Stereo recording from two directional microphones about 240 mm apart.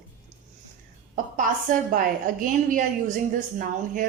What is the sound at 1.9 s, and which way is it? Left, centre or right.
Speech, right.